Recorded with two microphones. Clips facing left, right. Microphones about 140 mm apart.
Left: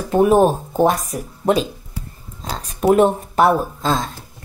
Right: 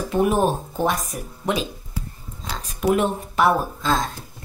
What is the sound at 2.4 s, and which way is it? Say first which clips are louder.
Speech: left 5 dB; 40° left (ahead or behind).